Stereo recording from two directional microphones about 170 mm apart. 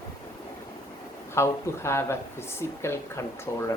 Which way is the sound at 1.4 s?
15° left (ahead or behind).